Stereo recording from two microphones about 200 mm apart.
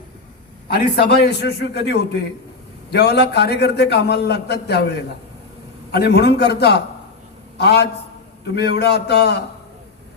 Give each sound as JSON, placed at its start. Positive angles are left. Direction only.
{"t": 0.9, "sound": "a man's voice", "side_deg": 55}